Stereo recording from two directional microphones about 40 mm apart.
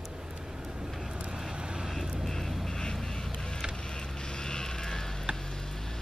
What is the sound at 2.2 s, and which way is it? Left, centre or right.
Vehicle, centre.